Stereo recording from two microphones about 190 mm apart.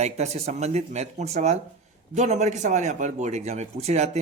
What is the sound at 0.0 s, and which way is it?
A man's voice, 35° right (ahead or behind).